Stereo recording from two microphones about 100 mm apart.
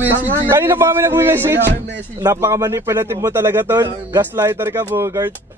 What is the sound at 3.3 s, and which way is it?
Speech, 20° right (ahead or behind).